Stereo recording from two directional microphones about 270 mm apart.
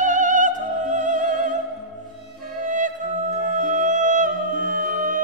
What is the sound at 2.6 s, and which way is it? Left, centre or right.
Music, right.